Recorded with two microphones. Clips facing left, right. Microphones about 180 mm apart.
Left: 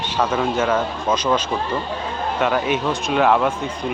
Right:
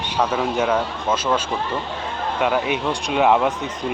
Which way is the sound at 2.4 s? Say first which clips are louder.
Left 1 dB; 15° right (ahead or behind).